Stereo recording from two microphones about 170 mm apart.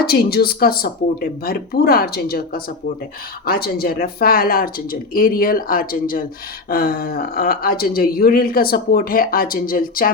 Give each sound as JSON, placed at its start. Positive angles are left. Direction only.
{"t": 0.0, "sound": "speech", "side_deg": 65}